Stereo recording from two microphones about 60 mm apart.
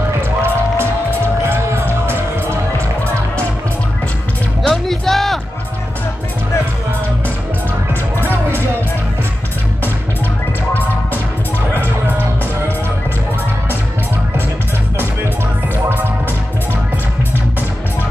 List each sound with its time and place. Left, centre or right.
1.5 s music: right
4.6 s music: centre
11.7 s music: right